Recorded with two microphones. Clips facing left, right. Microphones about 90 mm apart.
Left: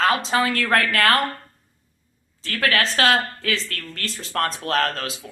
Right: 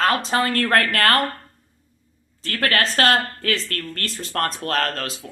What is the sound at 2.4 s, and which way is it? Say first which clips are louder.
Speech: even; 45° right (ahead or behind).